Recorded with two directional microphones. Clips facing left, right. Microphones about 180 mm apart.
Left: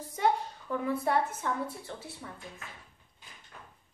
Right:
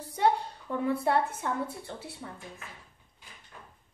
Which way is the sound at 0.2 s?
25° right (ahead or behind).